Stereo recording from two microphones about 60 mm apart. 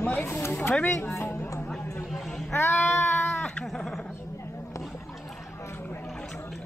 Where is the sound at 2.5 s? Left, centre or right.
Left.